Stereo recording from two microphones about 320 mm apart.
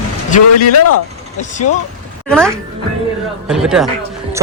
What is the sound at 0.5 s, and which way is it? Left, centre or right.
Speech, left.